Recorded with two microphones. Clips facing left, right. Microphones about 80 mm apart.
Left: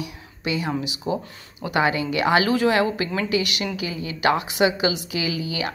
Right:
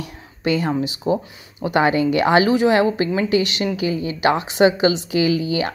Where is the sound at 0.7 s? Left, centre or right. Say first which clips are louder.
Right 5 dB; right.